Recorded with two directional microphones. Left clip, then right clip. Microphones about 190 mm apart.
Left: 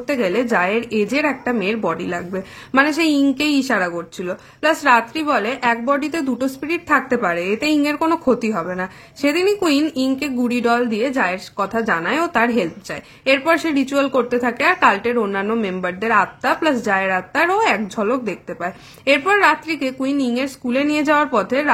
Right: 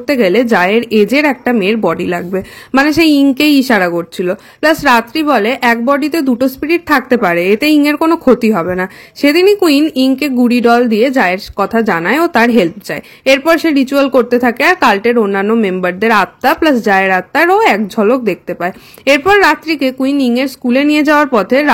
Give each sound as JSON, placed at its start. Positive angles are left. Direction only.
{"t": 0.0, "sound": "speech", "side_deg": -35}